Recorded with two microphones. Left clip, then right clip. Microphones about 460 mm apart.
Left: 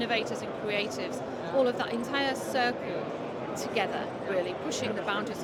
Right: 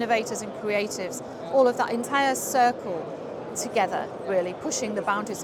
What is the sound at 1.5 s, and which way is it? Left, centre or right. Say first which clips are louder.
A woman's voice: right 7 dB; right.